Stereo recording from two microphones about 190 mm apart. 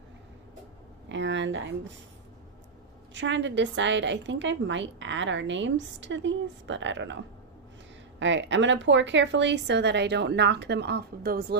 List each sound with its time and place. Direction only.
1.0 s a sound: 70° right (ahead or behind)
3.2 s a woman's voice: 70° right (ahead or behind)
8.2 s speech: 75° right (ahead or behind); by 11.5 s 55° right (ahead or behind)